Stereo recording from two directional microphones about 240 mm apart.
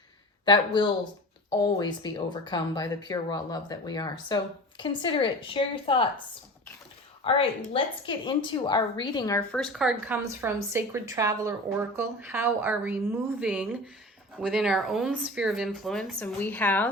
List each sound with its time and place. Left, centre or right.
0.4 s a woman's voice: centre
7.3 s a woman's voice: left
9.6 s speech: centre